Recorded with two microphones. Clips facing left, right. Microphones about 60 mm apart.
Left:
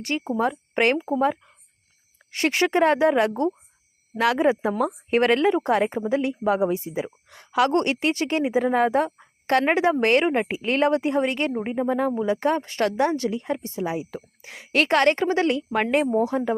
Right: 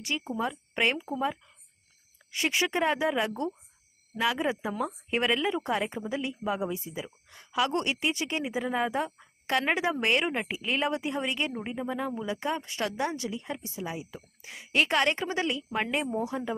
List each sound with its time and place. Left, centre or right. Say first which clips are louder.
0.2 s a woman's voice: left 8 dB; left
4.4 s a woman's voice: left 9 dB; left
7.7 s a woman's voice: left 7 dB; left
8.4 s a woman's voice: left 10 dB; left
9.6 s a woman's voice: left 7 dB; left
11.5 s a woman's voice: left 9 dB; left
13.6 s a woman's voice: left 9 dB; left